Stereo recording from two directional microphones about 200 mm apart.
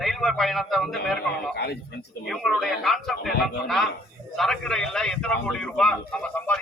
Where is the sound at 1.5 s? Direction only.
55° left (ahead or behind).